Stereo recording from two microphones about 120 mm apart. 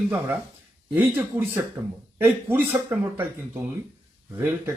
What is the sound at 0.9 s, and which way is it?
Speech, 15° right (ahead or behind).